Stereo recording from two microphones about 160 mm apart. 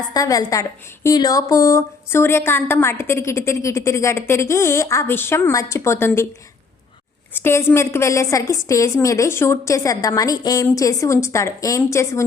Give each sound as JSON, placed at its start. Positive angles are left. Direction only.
{"t": 0.1, "sound": "a woman's voice", "side_deg": 20}
{"t": 7.3, "sound": "a woman's voice", "side_deg": 15}